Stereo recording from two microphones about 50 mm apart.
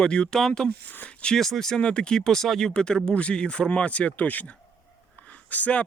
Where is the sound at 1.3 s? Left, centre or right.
Centre.